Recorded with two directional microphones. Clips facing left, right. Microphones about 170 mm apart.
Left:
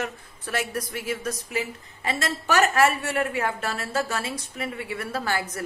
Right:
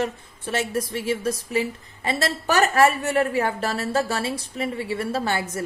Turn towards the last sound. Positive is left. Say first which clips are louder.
# right 3 dB
turn(degrees=-25)  # may be behind; listen again after turning